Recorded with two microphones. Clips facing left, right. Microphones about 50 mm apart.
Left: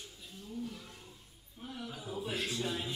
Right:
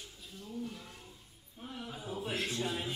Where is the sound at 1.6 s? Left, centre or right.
Centre.